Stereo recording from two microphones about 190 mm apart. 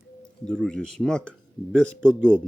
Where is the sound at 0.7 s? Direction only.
5° left (ahead or behind).